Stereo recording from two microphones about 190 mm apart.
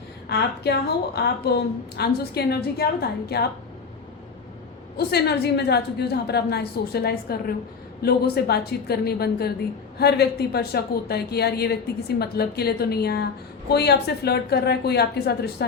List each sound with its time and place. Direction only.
0.3 s speech: 60° left (ahead or behind)
4.9 s speech: 60° left (ahead or behind)